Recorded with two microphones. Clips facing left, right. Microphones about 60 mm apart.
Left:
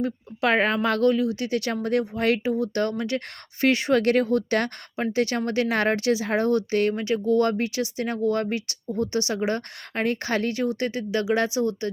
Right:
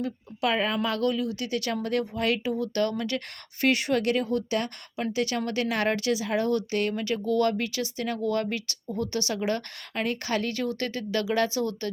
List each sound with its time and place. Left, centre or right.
0.0 s speech: left
5.1 s a woman's voice: left